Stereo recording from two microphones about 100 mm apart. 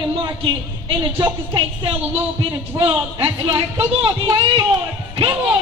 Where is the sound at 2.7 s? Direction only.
35° right (ahead or behind).